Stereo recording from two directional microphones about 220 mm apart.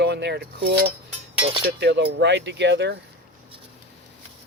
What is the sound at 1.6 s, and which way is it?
Speech, 50° right (ahead or behind).